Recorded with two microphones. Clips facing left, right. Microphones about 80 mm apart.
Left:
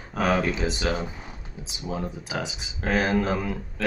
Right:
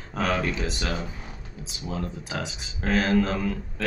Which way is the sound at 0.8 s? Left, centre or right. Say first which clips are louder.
Left 3 dB; centre.